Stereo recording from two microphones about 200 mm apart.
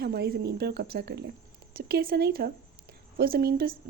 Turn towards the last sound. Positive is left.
turn(degrees=-50)  # may be behind; listen again after turning